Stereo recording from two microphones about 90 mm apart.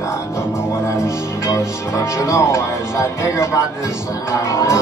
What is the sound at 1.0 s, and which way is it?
Speech, 30° left (ahead or behind).